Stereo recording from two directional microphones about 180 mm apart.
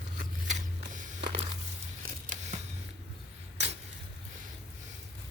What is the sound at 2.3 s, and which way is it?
Scissors, 40° right (ahead or behind).